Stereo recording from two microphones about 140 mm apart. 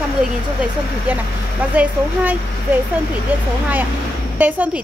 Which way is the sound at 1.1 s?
10° right (ahead or behind).